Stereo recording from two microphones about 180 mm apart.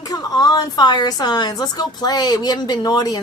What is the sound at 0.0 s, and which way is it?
A woman's voice, 20° left (ahead or behind).